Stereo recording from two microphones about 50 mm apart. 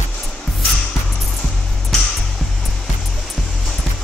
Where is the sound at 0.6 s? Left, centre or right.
Centre.